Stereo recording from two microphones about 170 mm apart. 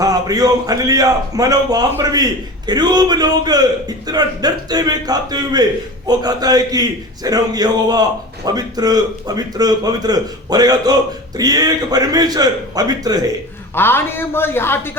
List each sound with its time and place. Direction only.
0.0 s a man's voice: 20° right (ahead or behind)
13.7 s a woman's voice: 15° left (ahead or behind)